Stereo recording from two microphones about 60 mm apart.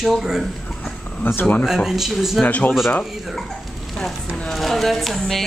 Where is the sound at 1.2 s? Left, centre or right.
Left.